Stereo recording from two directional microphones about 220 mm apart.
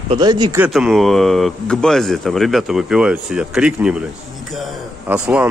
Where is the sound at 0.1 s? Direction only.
20° right (ahead or behind).